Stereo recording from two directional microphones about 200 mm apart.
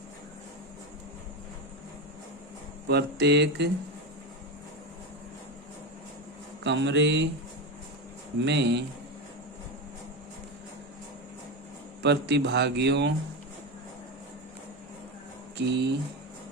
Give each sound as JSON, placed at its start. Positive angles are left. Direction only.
{"t": 2.8, "sound": "speech", "side_deg": -55}
{"t": 6.7, "sound": "speech", "side_deg": -65}
{"t": 8.4, "sound": "speech", "side_deg": -60}
{"t": 12.0, "sound": "speech", "side_deg": -60}
{"t": 15.5, "sound": "speech", "side_deg": -60}